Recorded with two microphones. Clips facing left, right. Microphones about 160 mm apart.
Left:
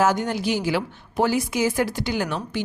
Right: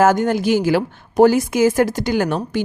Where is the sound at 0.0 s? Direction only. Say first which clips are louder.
Right 6 dB; 50° right (ahead or behind).